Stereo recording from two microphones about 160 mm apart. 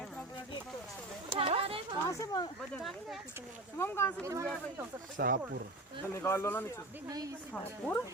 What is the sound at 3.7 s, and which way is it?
Speech, 15° left (ahead or behind).